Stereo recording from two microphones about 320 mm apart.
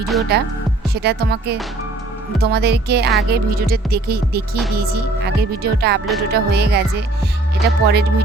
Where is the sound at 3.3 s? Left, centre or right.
Right.